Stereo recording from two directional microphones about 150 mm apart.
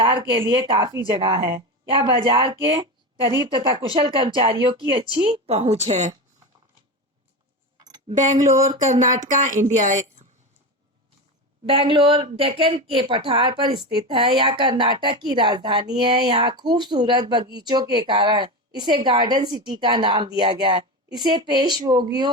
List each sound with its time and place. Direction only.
0.0 s a woman's voice: 30° right (ahead or behind); by 6.1 s 50° right (ahead or behind)
8.2 s a woman's voice: 55° right (ahead or behind)
11.7 s a woman's voice: 35° right (ahead or behind)